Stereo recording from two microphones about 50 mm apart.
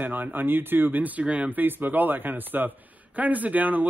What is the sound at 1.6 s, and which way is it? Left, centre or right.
Speech, right.